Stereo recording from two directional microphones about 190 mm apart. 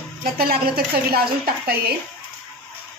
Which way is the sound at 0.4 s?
50° right (ahead or behind).